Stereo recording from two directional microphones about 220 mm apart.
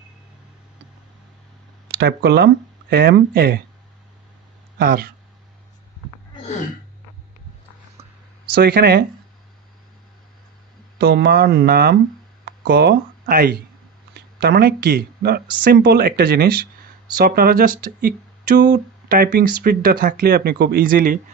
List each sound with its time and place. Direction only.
1.9 s speech: 50° right (ahead or behind)
4.7 s speech: 45° right (ahead or behind)
8.5 s speech: 45° right (ahead or behind)
11.0 s speech: 45° right (ahead or behind)